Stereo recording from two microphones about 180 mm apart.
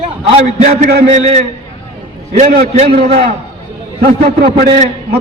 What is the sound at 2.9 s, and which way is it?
A man's voice, 60° right (ahead or behind).